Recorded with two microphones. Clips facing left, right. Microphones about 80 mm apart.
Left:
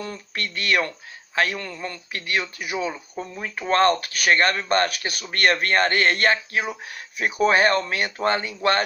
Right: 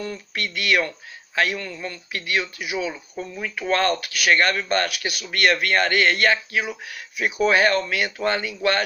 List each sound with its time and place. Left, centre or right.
0.0 s speech: left